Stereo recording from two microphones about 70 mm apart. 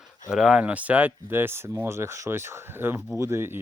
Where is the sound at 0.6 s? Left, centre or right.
Right.